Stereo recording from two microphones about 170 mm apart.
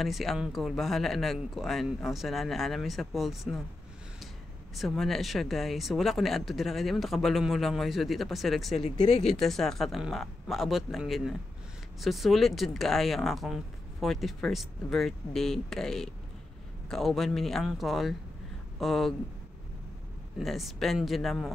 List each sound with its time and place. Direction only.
0.0 s speech: centre (ahead or behind)
4.7 s speech: centre (ahead or behind)
8.7 s speech: 30° left (ahead or behind)
9.4 s speech: centre (ahead or behind)
20.3 s speech: centre (ahead or behind)